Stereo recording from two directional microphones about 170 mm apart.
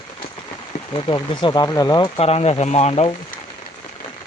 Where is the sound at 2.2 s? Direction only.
35° left (ahead or behind).